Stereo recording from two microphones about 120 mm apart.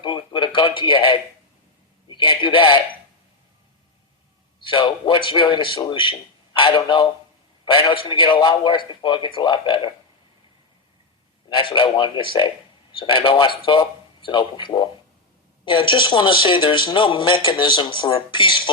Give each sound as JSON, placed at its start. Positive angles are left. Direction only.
{"t": 0.0, "sound": "a sound", "side_deg": 45}
{"t": 2.0, "sound": "a man's voice", "side_deg": 45}
{"t": 4.6, "sound": "a man's voice", "side_deg": 45}
{"t": 11.4, "sound": "a man's voice", "side_deg": 40}